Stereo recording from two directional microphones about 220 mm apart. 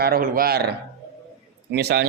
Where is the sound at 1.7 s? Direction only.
50° right (ahead or behind).